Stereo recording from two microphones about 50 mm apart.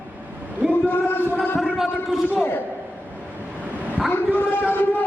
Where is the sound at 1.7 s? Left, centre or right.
Centre.